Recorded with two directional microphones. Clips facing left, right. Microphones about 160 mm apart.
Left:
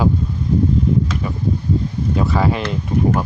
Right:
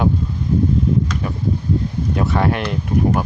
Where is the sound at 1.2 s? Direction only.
Centre (ahead or behind).